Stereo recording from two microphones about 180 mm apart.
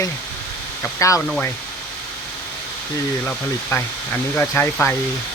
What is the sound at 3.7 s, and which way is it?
Speech, 15° left (ahead or behind).